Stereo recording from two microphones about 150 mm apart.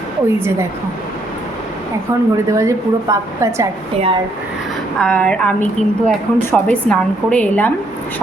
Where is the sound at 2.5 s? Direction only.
20° right (ahead or behind).